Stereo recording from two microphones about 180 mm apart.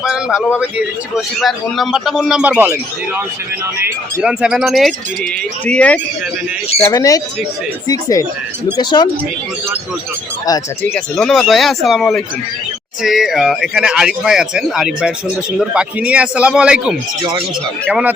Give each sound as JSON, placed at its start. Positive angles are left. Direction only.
{"t": 0.6, "sound": "speech", "side_deg": -5}
{"t": 6.8, "sound": "speech", "side_deg": 20}
{"t": 8.8, "sound": "speech", "side_deg": 25}
{"t": 10.4, "sound": "speech", "side_deg": 20}
{"t": 10.9, "sound": "speech", "side_deg": 0}